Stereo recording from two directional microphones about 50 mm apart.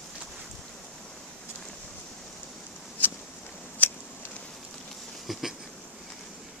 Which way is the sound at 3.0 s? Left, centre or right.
Left.